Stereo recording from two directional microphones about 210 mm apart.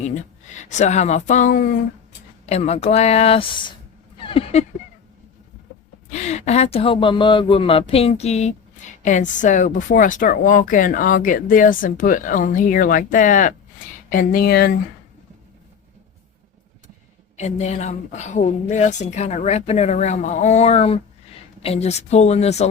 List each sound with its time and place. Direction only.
0.0 s speech: 35° left (ahead or behind)
2.5 s speech: 30° left (ahead or behind)
6.1 s speech: 35° left (ahead or behind)
17.3 s speech: 30° left (ahead or behind)